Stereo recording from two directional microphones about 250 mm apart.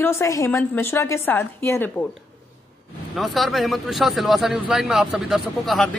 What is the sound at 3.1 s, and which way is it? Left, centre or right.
A man's voice, centre.